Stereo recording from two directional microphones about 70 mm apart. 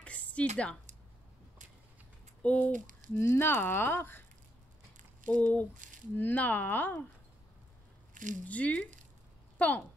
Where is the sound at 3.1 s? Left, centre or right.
Left.